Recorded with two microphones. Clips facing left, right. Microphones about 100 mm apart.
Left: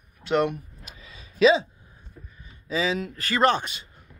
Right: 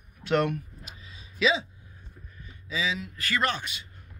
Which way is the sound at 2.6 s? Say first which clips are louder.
Left 5 dB; 45° left (ahead or behind).